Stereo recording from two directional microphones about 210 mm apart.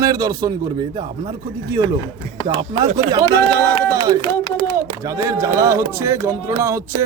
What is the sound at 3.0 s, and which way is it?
A man's voice, 20° right (ahead or behind).